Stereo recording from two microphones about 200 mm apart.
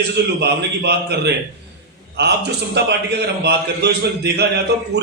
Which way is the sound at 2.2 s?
55° right (ahead or behind).